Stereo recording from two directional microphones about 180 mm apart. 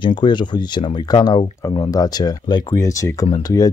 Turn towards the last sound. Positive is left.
turn(degrees=20)  # may be behind; listen again after turning